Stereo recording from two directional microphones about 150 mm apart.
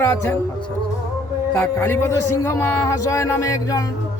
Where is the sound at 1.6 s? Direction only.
15° left (ahead or behind).